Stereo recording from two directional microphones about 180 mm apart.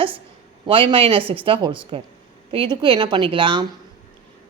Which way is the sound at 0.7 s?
30° right (ahead or behind).